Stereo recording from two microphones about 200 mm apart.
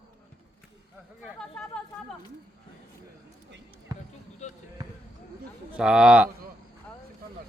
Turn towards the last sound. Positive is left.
turn(degrees=-5)  # may be behind; listen again after turning